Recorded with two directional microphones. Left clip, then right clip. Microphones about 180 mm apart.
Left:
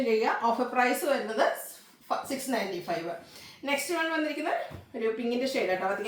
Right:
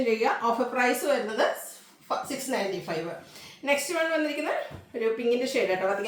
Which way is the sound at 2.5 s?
10° right (ahead or behind).